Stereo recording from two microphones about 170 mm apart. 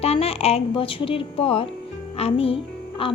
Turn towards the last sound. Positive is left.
turn(degrees=35)  # may be behind; listen again after turning